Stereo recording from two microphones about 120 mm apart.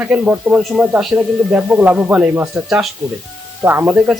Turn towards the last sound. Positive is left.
turn(degrees=-10)  # may be behind; listen again after turning